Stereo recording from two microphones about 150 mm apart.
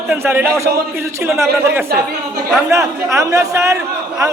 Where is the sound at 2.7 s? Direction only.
20° right (ahead or behind).